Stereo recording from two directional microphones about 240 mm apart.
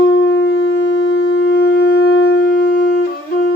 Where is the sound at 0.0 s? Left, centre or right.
Left.